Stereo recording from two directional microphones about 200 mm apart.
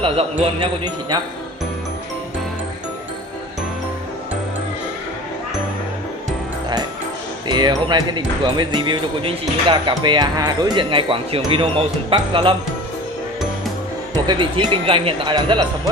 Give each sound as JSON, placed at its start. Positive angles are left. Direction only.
{"t": 0.0, "sound": "speech", "side_deg": -30}
{"t": 7.4, "sound": "speech", "side_deg": -20}
{"t": 14.1, "sound": "speech", "side_deg": -25}